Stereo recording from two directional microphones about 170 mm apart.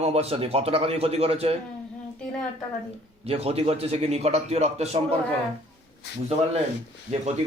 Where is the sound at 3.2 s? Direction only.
35° right (ahead or behind).